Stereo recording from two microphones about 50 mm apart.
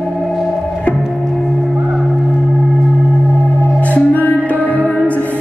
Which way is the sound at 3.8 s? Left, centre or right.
Left.